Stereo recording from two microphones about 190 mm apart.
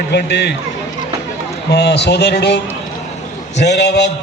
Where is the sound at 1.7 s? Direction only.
60° left (ahead or behind).